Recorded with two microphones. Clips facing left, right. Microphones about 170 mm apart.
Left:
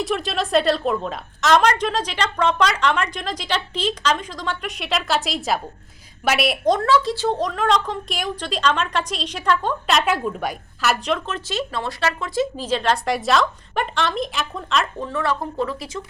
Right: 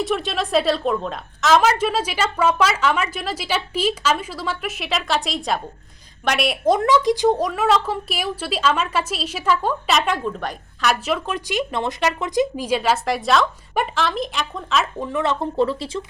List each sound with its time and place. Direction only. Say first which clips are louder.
0.0 s a woman's voice: right 1 dB; centre (ahead or behind)
6.7 s a woman's voice: right 2 dB; 15° right (ahead or behind)
15.0 s speech: right 2 dB; 20° right (ahead or behind)